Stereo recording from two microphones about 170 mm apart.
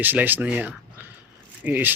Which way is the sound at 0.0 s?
10° right (ahead or behind).